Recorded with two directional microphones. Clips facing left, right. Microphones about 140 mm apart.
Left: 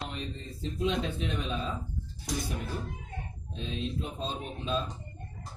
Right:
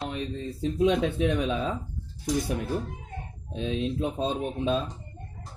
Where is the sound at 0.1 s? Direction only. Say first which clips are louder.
Right 7 dB; 65° right (ahead or behind).